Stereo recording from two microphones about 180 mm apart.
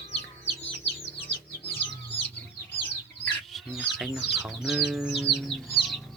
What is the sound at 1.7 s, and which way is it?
Chicken, 30° left (ahead or behind).